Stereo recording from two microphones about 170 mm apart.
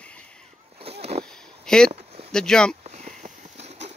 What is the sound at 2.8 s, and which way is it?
Sniff, 45° right (ahead or behind).